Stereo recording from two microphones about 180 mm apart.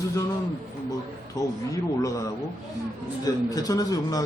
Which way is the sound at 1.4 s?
20° left (ahead or behind).